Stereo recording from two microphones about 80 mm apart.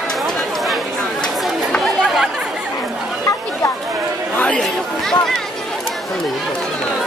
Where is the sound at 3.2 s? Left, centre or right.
Left.